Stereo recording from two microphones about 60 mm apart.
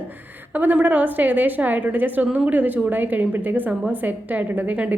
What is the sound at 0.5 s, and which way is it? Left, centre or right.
A woman's voice, right.